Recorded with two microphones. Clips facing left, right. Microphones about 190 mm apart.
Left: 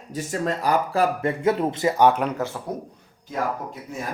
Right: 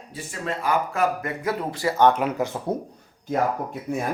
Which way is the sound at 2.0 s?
5° left (ahead or behind).